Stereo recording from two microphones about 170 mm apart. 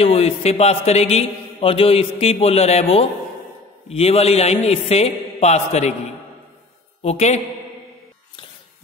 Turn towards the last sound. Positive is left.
turn(degrees=40)  # may be behind; listen again after turning